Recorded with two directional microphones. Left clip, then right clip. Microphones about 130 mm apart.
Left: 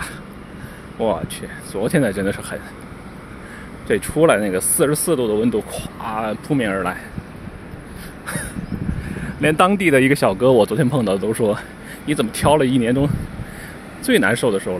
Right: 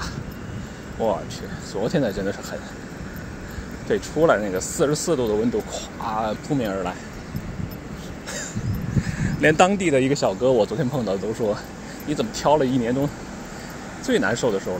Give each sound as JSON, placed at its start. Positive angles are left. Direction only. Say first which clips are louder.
{"t": 0.9, "sound": "speech", "louder": "left 3 dB", "side_deg": 55}
{"t": 3.8, "sound": "speech", "louder": "left 4 dB", "side_deg": 60}
{"t": 9.4, "sound": "speech", "louder": "left 1 dB", "side_deg": 10}
{"t": 9.7, "sound": "speech", "louder": "left 5 dB", "side_deg": 45}
{"t": 12.1, "sound": "speech", "louder": "left 3 dB", "side_deg": 65}
{"t": 14.0, "sound": "speech", "louder": "left 5 dB", "side_deg": 70}